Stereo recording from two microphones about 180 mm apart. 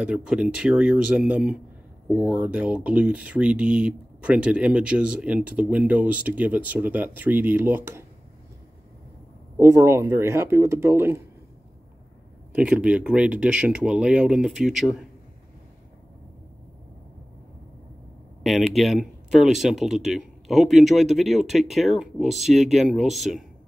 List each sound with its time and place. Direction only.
0.0 s speech: 5° right (ahead or behind)
9.6 s speech: 15° right (ahead or behind)
12.5 s speech: 5° right (ahead or behind)
18.8 s speech: centre (ahead or behind)